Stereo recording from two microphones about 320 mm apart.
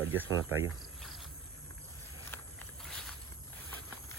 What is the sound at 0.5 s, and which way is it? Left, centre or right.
Cricket, centre.